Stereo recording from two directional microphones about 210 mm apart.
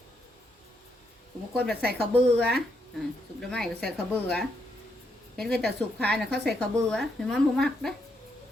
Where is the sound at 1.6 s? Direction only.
5° left (ahead or behind).